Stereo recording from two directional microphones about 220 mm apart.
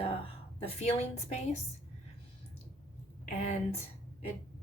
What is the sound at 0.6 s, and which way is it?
Speech, 30° left (ahead or behind).